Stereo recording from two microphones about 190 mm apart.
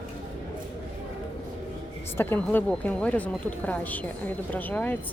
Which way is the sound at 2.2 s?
10° left (ahead or behind).